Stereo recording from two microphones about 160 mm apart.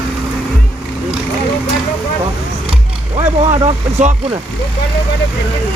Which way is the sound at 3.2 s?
45° right (ahead or behind).